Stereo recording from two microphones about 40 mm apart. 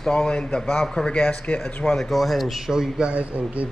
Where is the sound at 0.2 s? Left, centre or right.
Left.